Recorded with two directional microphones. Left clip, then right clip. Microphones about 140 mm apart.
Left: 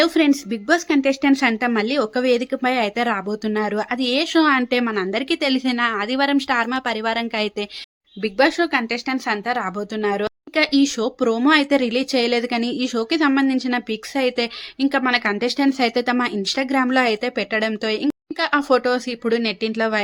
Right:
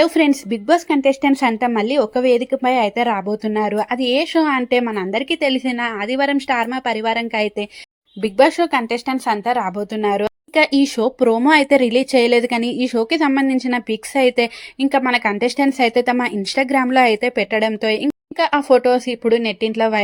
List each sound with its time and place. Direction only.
0.0 s speech: 30° right (ahead or behind)